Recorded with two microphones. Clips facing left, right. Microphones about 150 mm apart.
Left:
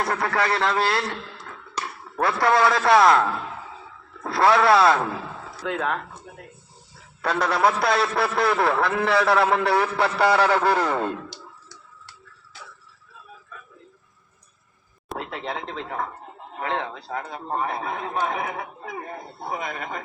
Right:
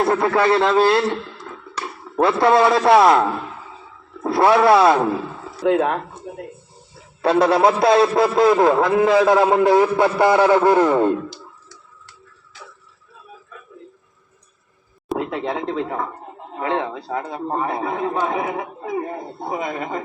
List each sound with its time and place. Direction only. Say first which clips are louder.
0.0 s speech: right 7 dB; 25° right (ahead or behind)
5.6 s a man's voice: right 9 dB; 40° right (ahead or behind); by 11.1 s 20° right (ahead or behind)
15.2 s a man's voice: right 6 dB; 35° right (ahead or behind)